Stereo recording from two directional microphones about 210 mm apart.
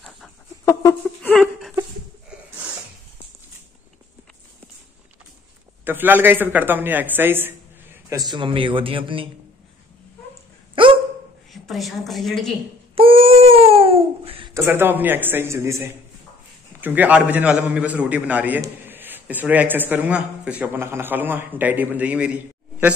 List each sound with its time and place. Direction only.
0.7 s a sound: 10° left (ahead or behind)
5.9 s a man's voice: 10° right (ahead or behind)
8.3 s speech: 25° right (ahead or behind)
10.7 s dog: 25° right (ahead or behind)
11.5 s a woman's voice: centre (ahead or behind)
12.9 s babbling: 25° right (ahead or behind)
14.5 s a man's voice: 10° right (ahead or behind)